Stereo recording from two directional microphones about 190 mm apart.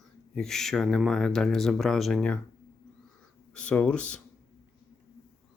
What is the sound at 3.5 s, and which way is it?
Speech, 5° left (ahead or behind).